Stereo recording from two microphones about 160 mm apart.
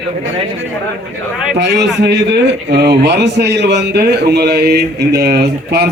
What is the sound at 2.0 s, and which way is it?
A man's voice, 90° right.